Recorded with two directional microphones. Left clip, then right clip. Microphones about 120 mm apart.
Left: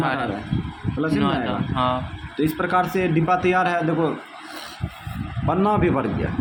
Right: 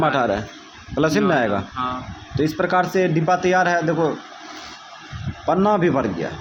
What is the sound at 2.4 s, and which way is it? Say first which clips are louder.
A man's voice: right 2 dB; 20° right (ahead or behind).